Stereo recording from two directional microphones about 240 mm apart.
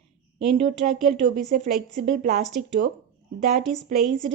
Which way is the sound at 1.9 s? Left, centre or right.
Right.